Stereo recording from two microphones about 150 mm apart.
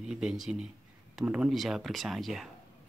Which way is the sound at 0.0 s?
5° right (ahead or behind).